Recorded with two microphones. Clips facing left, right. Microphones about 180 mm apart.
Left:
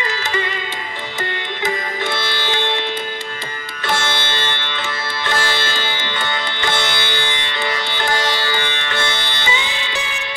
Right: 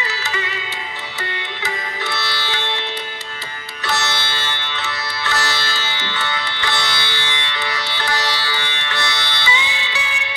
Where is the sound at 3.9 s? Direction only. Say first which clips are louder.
Left 2 dB; 50° left (ahead or behind).